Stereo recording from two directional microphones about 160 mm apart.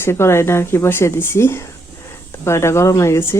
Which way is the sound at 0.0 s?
15° left (ahead or behind).